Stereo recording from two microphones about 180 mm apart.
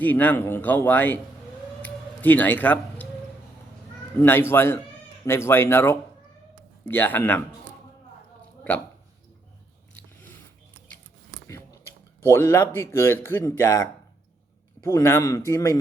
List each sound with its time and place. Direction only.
0.0 s speech: 10° left (ahead or behind)
1.8 s a sound: 10° left (ahead or behind)
4.2 s speech: 10° left (ahead or behind)
11.4 s speech: 15° left (ahead or behind)